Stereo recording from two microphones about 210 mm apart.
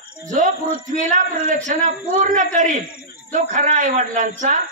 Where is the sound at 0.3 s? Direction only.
35° right (ahead or behind).